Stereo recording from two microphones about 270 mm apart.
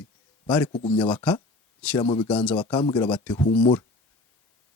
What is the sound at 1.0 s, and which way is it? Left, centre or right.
Speech, centre.